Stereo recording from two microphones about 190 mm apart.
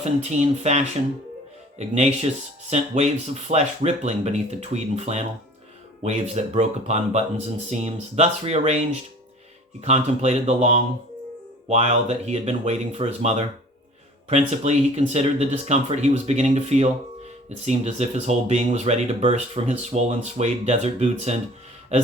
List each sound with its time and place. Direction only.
0.0 s speech: 35° right (ahead or behind)
9.8 s speech: 35° right (ahead or behind)